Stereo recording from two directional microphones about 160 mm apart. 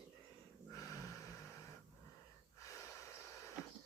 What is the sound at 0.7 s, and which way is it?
Snort, 20° left (ahead or behind).